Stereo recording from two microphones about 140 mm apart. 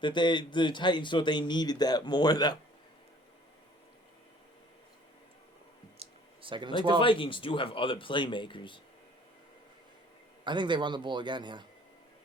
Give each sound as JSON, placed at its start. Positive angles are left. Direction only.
{"t": 0.0, "sound": "speech", "side_deg": 35}
{"t": 6.0, "sound": "a sound", "side_deg": -35}
{"t": 7.0, "sound": "speech", "side_deg": 40}
{"t": 10.4, "sound": "a man's voice", "side_deg": -35}